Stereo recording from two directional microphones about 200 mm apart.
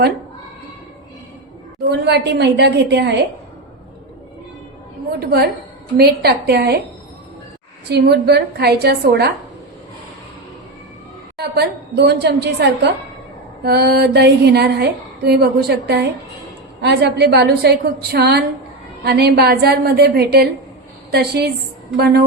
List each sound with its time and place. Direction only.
2.0 s a woman's voice: 55° right (ahead or behind)
5.2 s a woman's voice: 50° right (ahead or behind)
7.9 s a woman's voice: 55° right (ahead or behind)
11.3 s a woman's voice: 55° right (ahead or behind)